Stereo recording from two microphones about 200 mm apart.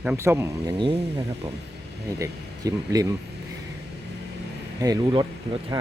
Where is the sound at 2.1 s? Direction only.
15° right (ahead or behind).